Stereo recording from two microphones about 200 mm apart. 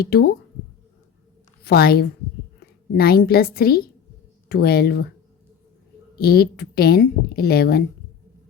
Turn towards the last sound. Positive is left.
turn(degrees=50)  # may be behind; listen again after turning